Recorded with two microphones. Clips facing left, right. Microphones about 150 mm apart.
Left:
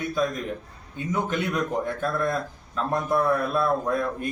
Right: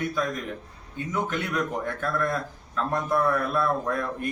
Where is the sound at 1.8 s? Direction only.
20° left (ahead or behind).